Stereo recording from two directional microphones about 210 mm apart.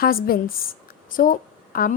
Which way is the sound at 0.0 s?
45° left (ahead or behind).